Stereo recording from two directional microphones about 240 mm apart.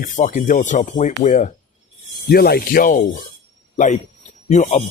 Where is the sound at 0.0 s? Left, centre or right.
Left.